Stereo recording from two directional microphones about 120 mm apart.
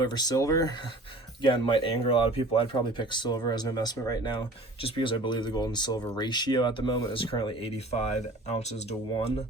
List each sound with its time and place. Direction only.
0.0 s speech: 35° left (ahead or behind)
1.4 s speech: 40° left (ahead or behind)
7.9 s speech: 65° left (ahead or behind)